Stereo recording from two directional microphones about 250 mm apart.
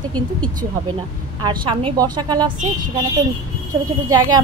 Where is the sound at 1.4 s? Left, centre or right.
Centre.